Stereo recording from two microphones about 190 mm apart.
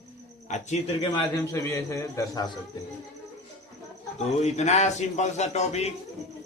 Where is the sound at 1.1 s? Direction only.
15° left (ahead or behind).